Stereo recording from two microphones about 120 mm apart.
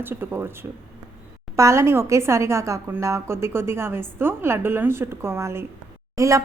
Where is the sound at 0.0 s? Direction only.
20° right (ahead or behind).